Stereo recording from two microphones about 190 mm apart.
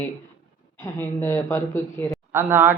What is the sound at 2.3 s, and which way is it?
Speech, 10° right (ahead or behind).